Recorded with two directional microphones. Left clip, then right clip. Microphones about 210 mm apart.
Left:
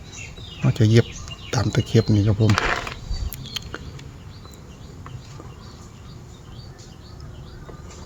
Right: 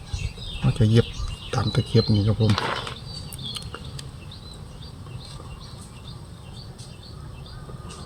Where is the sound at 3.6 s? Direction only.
40° left (ahead or behind).